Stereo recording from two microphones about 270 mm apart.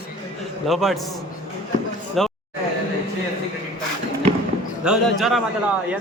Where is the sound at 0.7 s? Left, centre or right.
Centre.